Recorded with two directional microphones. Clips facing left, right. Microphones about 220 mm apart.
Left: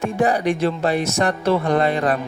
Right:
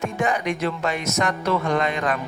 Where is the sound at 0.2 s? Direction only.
35° left (ahead or behind).